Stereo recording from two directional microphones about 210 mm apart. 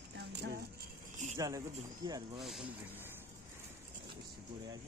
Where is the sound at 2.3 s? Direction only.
Centre (ahead or behind).